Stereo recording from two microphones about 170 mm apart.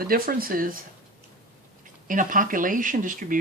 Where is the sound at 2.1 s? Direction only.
50° right (ahead or behind).